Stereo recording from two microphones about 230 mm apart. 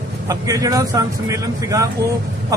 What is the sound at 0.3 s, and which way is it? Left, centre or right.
Speech, centre.